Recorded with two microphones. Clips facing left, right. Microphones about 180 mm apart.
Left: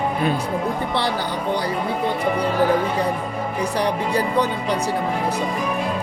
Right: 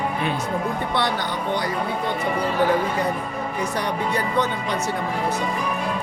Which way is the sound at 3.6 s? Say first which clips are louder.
Left 4 dB; 35° left (ahead or behind).